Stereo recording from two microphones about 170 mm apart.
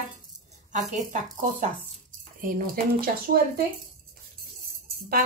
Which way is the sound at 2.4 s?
55° right (ahead or behind).